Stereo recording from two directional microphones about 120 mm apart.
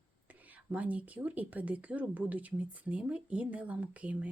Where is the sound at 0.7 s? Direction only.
10° right (ahead or behind).